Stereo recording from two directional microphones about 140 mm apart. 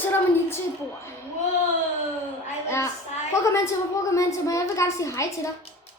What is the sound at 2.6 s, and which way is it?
Child singing, 20° left (ahead or behind).